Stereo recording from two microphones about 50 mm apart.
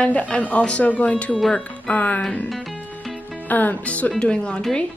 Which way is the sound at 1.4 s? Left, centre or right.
Centre.